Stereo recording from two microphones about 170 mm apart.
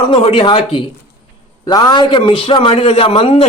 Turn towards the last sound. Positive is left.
turn(degrees=35)  # may be behind; listen again after turning